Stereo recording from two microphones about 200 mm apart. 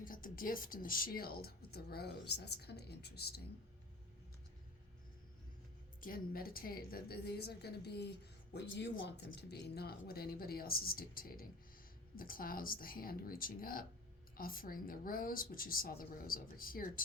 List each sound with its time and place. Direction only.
0.0 s a woman's voice: 45° left (ahead or behind)
6.0 s a woman's voice: 45° left (ahead or behind)